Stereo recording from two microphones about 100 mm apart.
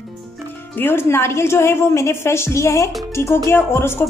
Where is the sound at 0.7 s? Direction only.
20° left (ahead or behind).